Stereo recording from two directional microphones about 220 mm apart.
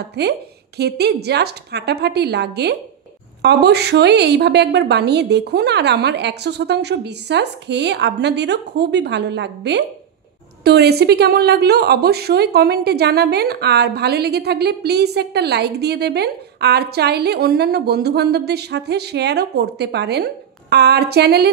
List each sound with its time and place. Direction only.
0.1 s a woman's voice: 50° right (ahead or behind)